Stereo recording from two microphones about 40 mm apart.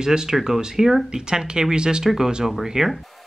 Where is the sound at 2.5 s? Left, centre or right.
Centre.